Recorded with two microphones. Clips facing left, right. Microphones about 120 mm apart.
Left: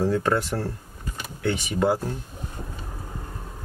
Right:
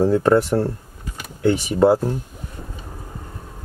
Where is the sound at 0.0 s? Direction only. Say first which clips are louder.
Right 7 dB; 30° right (ahead or behind).